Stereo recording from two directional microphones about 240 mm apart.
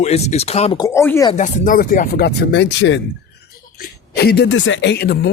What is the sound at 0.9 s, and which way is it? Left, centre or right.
Speech, centre.